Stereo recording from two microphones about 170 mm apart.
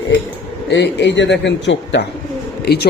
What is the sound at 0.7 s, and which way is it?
A man's voice, 90° left.